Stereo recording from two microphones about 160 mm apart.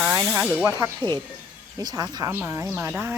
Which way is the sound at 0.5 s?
15° right (ahead or behind).